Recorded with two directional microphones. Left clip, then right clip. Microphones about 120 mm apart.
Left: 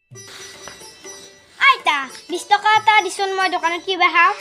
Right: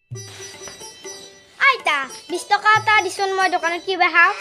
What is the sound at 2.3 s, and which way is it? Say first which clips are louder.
A child's voice: left 1 dB; 30° right (ahead or behind).